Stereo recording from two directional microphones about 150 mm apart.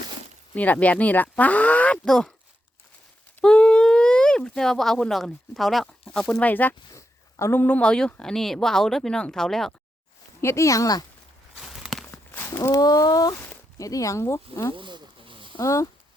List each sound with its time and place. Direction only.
0.5 s speech: 10° left (ahead or behind)
3.4 s speech: 5° left (ahead or behind)
10.4 s speech: 20° left (ahead or behind)
11.6 s a sound: centre (ahead or behind)
12.3 s speech: 15° left (ahead or behind)
14.8 s a sound: 30° right (ahead or behind)
15.5 s speech: 20° left (ahead or behind)